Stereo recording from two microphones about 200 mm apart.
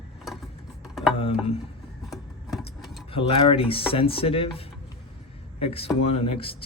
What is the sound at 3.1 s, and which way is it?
Speech, 25° left (ahead or behind).